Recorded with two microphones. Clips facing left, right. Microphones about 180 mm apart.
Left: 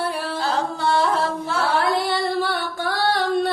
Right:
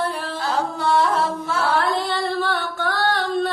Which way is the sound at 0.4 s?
30° left (ahead or behind).